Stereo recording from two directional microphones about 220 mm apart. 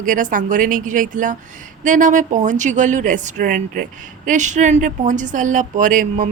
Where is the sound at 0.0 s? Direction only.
35° right (ahead or behind).